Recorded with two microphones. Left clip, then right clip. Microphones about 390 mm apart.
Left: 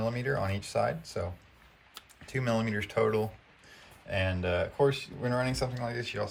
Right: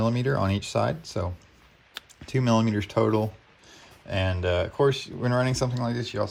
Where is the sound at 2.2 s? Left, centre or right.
Centre.